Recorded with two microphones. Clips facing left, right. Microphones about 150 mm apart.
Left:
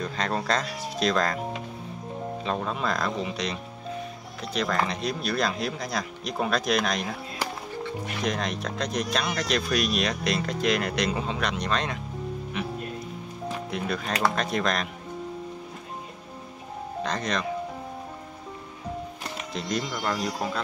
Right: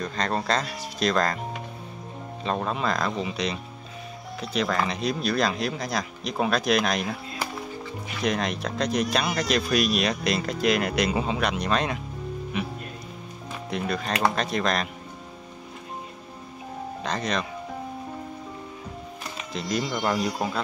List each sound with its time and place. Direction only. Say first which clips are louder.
0.0 s speech: right 1 dB; 5° left (ahead or behind)
2.4 s speech: right 3 dB; centre (ahead or behind)
8.2 s speech: right 4 dB; centre (ahead or behind)
17.0 s speech: even; centre (ahead or behind)
19.9 s speech: right 3 dB; 20° right (ahead or behind)